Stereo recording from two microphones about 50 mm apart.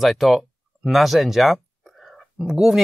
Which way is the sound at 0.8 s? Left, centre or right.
Centre.